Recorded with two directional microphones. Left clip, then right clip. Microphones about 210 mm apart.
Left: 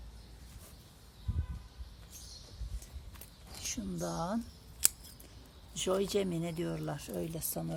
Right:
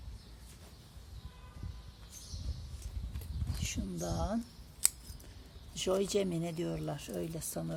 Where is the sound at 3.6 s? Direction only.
5° left (ahead or behind).